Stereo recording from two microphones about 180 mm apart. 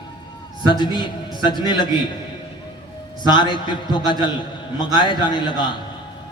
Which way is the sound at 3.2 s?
25° left (ahead or behind).